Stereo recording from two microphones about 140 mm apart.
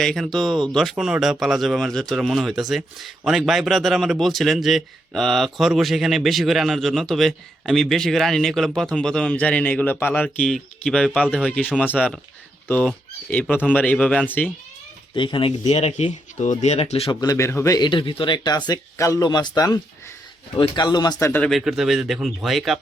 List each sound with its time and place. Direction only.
0.0 s speech: centre (ahead or behind)
15.1 s speech: 35° left (ahead or behind)
15.6 s speech: 50° left (ahead or behind)
17.1 s speech: 25° left (ahead or behind)
21.4 s speech: centre (ahead or behind)